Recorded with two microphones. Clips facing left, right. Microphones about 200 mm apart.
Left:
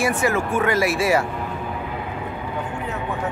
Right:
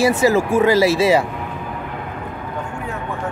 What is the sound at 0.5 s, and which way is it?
Speech, 25° right (ahead or behind).